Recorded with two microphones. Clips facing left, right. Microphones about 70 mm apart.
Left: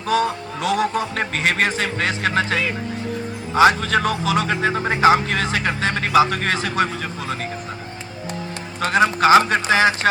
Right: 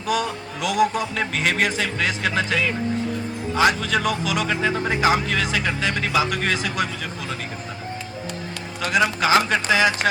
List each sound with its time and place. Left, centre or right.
0.0 s a man's voice: left
8.8 s a man's voice: left